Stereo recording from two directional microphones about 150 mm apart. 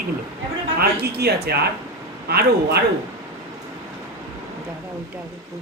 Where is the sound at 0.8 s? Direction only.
90° right.